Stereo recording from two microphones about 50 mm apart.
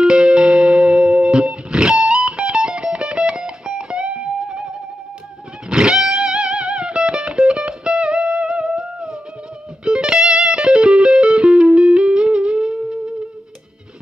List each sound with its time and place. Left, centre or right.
0.0 s music: centre